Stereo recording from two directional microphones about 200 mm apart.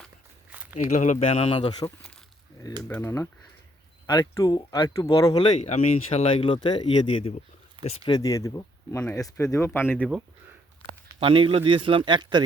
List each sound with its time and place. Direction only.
0.5 s a sound: 10° right (ahead or behind)
0.8 s speech: 35° left (ahead or behind)
2.8 s speech: 10° left (ahead or behind)
5.5 s speech: 35° left (ahead or behind); by 10.1 s 10° left (ahead or behind)
11.2 s speech: 25° right (ahead or behind)